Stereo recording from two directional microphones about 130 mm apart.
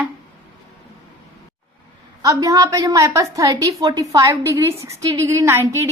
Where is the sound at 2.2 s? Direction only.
25° right (ahead or behind).